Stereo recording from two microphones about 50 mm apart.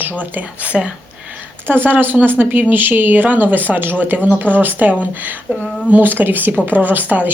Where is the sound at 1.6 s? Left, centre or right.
Right.